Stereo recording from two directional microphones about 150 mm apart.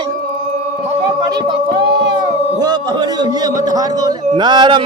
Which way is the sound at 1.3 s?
30° right (ahead or behind).